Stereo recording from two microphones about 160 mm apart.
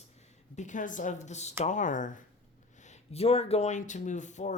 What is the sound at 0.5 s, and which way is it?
Speech, 50° left (ahead or behind).